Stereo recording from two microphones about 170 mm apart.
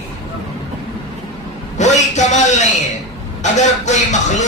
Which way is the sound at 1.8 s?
45° left (ahead or behind).